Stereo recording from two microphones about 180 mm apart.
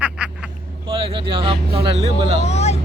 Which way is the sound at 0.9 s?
30° right (ahead or behind).